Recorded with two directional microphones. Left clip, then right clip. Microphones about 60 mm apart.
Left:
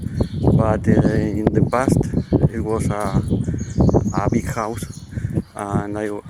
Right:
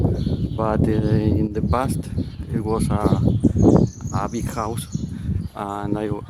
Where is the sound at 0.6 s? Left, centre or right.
Centre.